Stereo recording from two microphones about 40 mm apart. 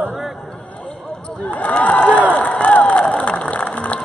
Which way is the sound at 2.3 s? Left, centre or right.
Left.